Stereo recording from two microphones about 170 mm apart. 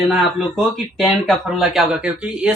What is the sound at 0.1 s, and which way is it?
Speech, centre (ahead or behind).